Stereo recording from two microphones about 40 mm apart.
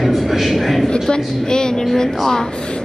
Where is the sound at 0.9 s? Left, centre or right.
Centre.